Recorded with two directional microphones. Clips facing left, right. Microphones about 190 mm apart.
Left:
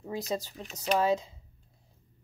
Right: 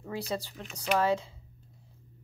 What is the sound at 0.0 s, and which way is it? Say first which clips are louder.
A woman's voice: left 1 dB; 15° left (ahead or behind).